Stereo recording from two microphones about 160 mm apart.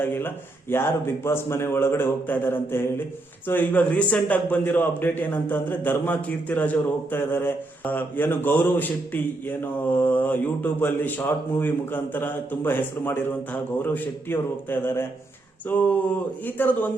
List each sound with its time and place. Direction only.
0.0 s speech: 15° left (ahead or behind)